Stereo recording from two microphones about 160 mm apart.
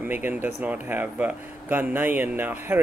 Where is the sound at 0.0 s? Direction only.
10° right (ahead or behind).